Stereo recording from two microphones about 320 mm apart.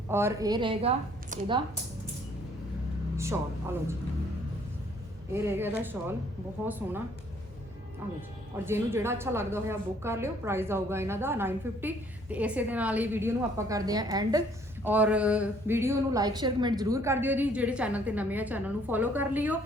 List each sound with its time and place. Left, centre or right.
0.1 s a woman's voice: centre
3.2 s speech: centre
5.3 s a woman's voice: centre
8.0 s a woman's voice: centre